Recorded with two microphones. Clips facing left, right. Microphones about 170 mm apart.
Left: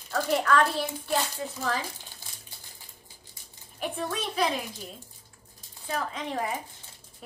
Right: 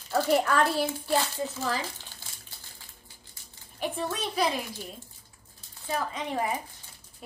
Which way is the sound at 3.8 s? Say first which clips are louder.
Right 1 dB; centre (ahead or behind).